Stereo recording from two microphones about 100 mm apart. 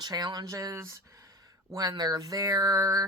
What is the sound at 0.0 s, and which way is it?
Speech, 40° right (ahead or behind).